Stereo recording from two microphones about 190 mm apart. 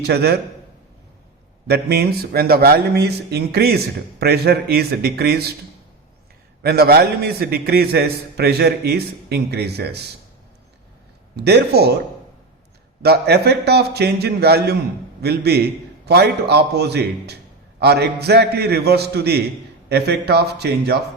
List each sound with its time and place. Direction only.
0.0 s a man's voice: 60° right (ahead or behind)
1.6 s a man's voice: 60° right (ahead or behind)
6.6 s a man's voice: 55° right (ahead or behind)
11.3 s a man's voice: 60° right (ahead or behind)
13.0 s a man's voice: 60° right (ahead or behind)